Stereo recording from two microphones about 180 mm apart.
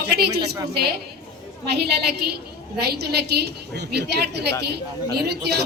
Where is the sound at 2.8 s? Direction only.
65° right (ahead or behind).